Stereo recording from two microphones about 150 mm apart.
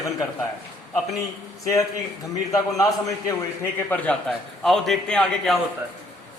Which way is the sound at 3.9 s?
5° left (ahead or behind).